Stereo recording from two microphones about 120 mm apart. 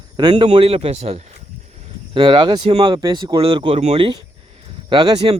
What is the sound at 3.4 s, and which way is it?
Speech, 45° right (ahead or behind).